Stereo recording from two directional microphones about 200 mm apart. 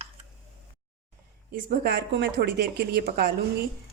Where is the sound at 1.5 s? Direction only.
50° right (ahead or behind).